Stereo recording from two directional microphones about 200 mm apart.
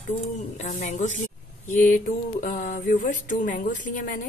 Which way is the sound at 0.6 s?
35° left (ahead or behind).